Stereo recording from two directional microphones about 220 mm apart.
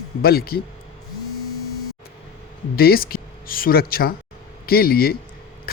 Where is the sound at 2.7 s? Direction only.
45° left (ahead or behind).